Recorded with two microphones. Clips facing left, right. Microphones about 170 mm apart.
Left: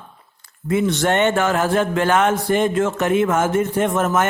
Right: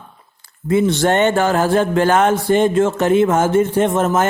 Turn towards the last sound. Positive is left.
turn(degrees=-30)  # may be behind; listen again after turning